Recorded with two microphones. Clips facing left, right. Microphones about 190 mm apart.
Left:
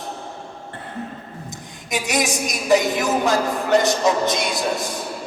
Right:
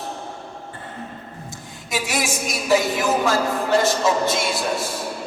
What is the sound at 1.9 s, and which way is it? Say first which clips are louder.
A man's voice: left 2 dB; 20° left (ahead or behind).